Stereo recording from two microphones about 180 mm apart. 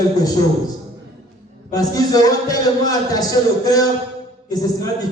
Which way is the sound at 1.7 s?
20° left (ahead or behind).